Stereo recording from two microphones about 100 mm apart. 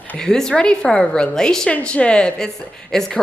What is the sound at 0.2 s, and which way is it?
A woman's voice, 5° left (ahead or behind).